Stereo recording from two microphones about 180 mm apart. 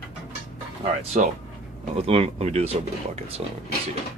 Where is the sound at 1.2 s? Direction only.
45° right (ahead or behind).